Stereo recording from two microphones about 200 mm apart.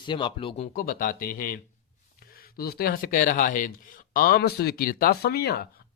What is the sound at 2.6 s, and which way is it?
Speech, 50° left (ahead or behind).